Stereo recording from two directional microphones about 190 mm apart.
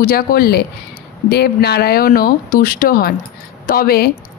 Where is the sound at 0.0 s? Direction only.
50° left (ahead or behind).